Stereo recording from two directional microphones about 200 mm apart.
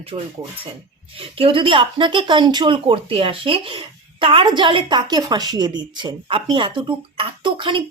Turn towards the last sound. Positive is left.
turn(degrees=-25)  # may be behind; listen again after turning